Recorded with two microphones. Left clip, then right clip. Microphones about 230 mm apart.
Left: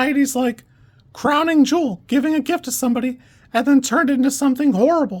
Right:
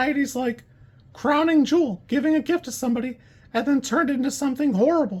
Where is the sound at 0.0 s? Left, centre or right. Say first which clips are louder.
Left 5 dB; left.